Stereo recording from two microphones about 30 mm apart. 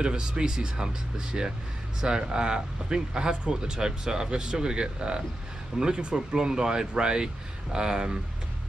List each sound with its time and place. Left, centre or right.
0.0 s speech: right